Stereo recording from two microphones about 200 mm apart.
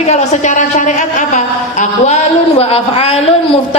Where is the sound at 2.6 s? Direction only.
30° left (ahead or behind).